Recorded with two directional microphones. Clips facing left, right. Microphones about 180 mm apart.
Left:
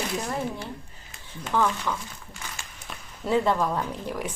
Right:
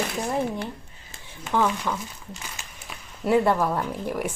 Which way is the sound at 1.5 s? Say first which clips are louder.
Right 1 dB; 15° right (ahead or behind).